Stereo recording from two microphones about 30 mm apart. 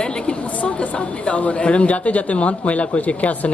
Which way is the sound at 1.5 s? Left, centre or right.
Left.